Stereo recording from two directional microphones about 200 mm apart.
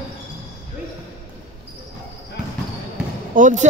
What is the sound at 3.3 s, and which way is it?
Speech, 40° right (ahead or behind).